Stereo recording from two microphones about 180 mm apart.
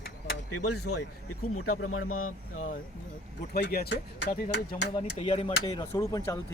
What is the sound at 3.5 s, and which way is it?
Speech, 60° left (ahead or behind).